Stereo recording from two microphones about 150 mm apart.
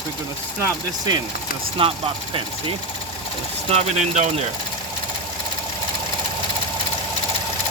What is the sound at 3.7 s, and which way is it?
Speech, 50° right (ahead or behind).